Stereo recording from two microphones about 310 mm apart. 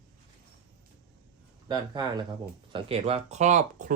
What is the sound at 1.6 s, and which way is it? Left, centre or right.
Speech, centre.